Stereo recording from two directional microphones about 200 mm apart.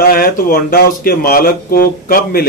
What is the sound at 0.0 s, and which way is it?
Speech, 45° left (ahead or behind).